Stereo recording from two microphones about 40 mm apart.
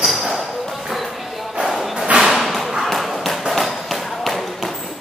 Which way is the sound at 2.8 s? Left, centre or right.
Centre.